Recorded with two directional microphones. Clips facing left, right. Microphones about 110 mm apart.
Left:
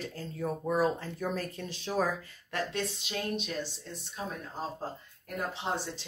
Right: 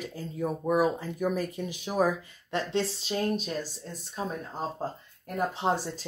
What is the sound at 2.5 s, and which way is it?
Speech, 30° right (ahead or behind).